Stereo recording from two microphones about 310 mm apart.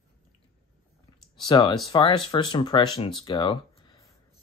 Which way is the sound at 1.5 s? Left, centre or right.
Centre.